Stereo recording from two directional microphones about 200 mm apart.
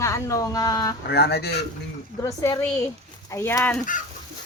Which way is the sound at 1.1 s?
50° left (ahead or behind).